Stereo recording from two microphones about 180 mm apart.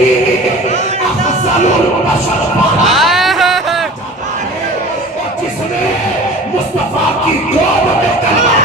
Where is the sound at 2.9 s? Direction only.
Centre (ahead or behind).